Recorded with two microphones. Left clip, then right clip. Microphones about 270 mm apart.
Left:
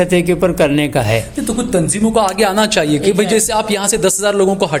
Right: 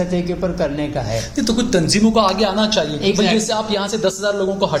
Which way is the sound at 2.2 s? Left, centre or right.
Left.